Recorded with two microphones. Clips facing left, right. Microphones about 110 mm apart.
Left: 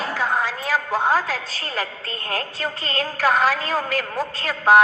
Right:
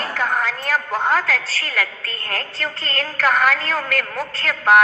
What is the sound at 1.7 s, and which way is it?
Speech, 25° left (ahead or behind).